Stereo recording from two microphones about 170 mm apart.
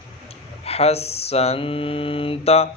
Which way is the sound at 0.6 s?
35° left (ahead or behind).